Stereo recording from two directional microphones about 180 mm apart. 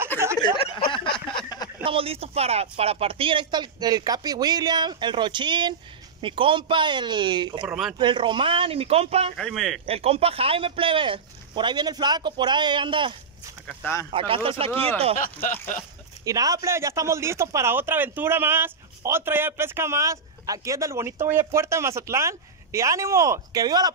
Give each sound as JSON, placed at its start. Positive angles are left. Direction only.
{"t": 0.4, "sound": "a sound", "side_deg": 30}
{"t": 1.9, "sound": "speech", "side_deg": -30}
{"t": 7.6, "sound": "speech", "side_deg": 0}
{"t": 8.0, "sound": "speech", "side_deg": -25}
{"t": 9.4, "sound": "speech", "side_deg": 0}
{"t": 9.8, "sound": "speech", "side_deg": -35}
{"t": 14.1, "sound": "speech", "side_deg": -30}
{"t": 16.3, "sound": "speech", "side_deg": -20}